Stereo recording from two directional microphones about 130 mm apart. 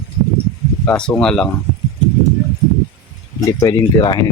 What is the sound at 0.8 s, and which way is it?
Speech, 5° left (ahead or behind).